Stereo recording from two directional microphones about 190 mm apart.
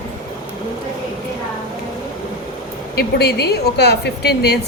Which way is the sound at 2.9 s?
60° left (ahead or behind).